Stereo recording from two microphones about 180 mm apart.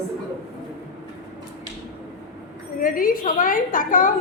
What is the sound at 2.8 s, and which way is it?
A woman's voice, 50° left (ahead or behind).